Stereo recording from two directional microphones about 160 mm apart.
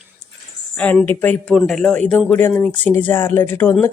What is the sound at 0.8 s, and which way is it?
Speech, 10° left (ahead or behind).